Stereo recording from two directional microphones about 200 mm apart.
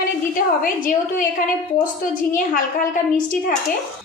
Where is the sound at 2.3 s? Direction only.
40° left (ahead or behind).